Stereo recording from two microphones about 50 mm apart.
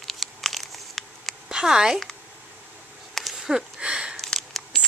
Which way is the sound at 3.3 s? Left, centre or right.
Centre.